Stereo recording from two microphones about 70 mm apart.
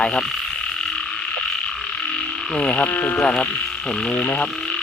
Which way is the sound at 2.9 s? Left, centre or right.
Left.